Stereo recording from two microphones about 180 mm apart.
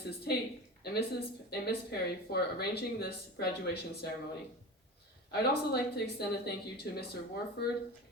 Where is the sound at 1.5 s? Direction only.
60° left (ahead or behind).